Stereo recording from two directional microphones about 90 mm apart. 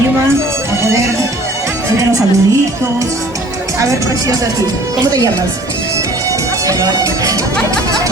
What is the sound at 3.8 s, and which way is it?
Music, 35° right (ahead or behind).